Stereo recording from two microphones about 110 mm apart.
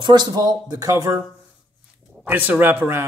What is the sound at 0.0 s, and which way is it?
A man's voice, 40° right (ahead or behind).